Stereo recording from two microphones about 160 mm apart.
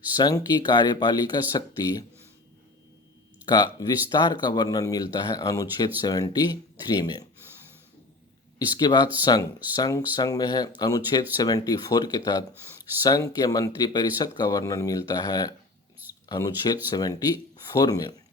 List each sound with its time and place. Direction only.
0.2 s speech: 25° left (ahead or behind)
3.4 s speech: 25° left (ahead or behind)
8.5 s speech: 25° left (ahead or behind)